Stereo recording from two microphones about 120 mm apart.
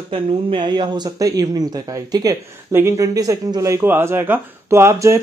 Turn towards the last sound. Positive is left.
turn(degrees=-20)  # may be behind; listen again after turning